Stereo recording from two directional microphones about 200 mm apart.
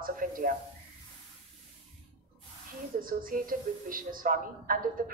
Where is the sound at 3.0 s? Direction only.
45° right (ahead or behind).